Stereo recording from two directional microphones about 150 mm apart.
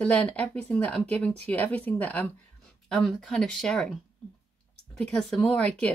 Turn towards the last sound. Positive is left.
turn(degrees=10)  # may be behind; listen again after turning